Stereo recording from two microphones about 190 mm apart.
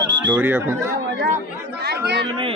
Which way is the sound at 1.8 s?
60° right (ahead or behind).